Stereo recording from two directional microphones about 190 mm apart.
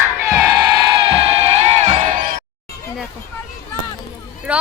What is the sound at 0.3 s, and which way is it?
Crowd, 20° right (ahead or behind).